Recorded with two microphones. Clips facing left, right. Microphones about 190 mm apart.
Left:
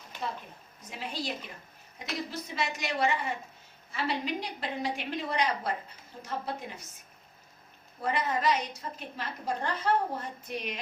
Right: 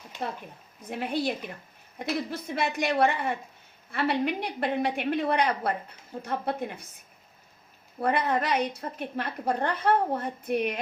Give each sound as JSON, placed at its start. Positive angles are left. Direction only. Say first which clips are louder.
{"t": 0.8, "sound": "a woman's voice", "louder": "right 8 dB", "side_deg": -55}
{"t": 7.9, "sound": "a woman's voice", "louder": "right 5 dB", "side_deg": -60}